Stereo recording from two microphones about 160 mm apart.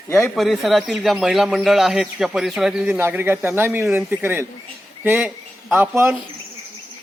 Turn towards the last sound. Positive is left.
turn(degrees=-10)  # may be behind; listen again after turning